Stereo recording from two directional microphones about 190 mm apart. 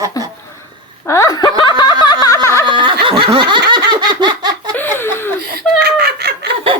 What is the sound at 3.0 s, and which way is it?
Snicker, 25° right (ahead or behind).